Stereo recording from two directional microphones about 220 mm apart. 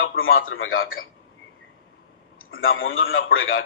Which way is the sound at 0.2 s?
65° left (ahead or behind).